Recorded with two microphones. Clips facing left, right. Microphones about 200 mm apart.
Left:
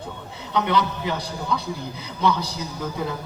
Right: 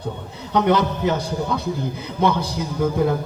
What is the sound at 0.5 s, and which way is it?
Speech, 45° right (ahead or behind).